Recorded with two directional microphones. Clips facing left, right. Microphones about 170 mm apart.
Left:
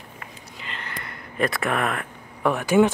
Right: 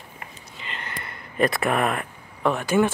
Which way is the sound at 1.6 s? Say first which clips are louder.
Right 2 dB; 5° right (ahead or behind).